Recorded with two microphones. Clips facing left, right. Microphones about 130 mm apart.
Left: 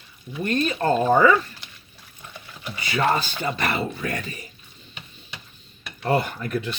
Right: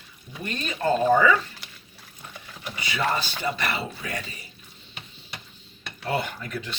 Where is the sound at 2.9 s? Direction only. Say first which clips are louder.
Left 4 dB; 50° left (ahead or behind).